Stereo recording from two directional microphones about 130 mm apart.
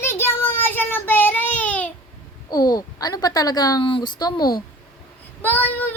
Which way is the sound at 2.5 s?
30° left (ahead or behind).